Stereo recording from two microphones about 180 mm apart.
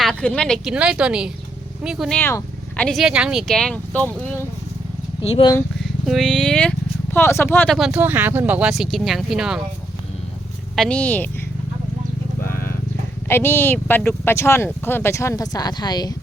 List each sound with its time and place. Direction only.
0.0 s speech: 5° left (ahead or behind)
5.2 s speech: 35° left (ahead or behind)
5.8 s speech: centre (ahead or behind)
7.8 s speech: 5° right (ahead or behind)
10.8 s speech: 5° left (ahead or behind)
13.2 s speech: 15° left (ahead or behind)